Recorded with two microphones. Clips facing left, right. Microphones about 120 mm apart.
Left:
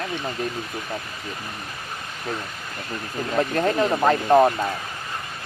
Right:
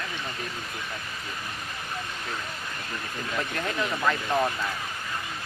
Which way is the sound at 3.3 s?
40° left (ahead or behind).